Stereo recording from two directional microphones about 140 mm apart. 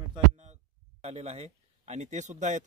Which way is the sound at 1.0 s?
50° right (ahead or behind).